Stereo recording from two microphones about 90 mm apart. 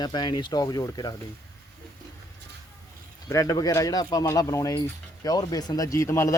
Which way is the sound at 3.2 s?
40° left (ahead or behind).